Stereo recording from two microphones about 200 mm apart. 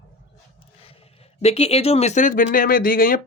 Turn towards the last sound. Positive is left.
turn(degrees=45)  # may be behind; listen again after turning